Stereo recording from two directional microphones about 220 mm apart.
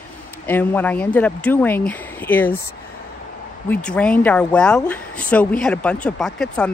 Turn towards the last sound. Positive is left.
turn(degrees=5)  # may be behind; listen again after turning